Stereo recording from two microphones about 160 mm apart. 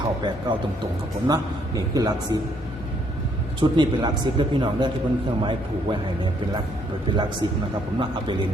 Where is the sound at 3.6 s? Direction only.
30° right (ahead or behind).